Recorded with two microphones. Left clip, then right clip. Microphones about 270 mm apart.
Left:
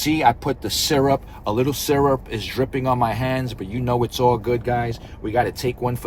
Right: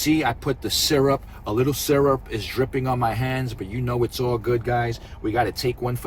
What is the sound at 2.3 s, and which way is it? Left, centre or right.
Speech, centre.